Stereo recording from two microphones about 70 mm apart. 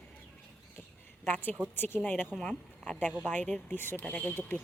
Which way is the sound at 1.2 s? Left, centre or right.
Left.